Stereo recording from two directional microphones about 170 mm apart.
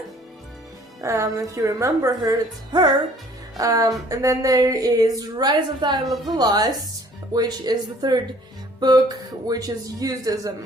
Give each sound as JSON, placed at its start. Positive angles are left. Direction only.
{"t": 1.0, "sound": "a woman's voice", "side_deg": -20}
{"t": 3.6, "sound": "a woman's voice", "side_deg": -20}